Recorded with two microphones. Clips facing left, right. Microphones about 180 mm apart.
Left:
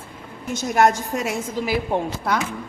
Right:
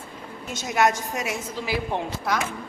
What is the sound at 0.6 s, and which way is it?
Speech, 50° left (ahead or behind).